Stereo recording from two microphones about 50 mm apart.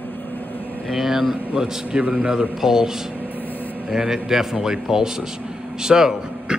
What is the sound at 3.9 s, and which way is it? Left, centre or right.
A man's voice, centre.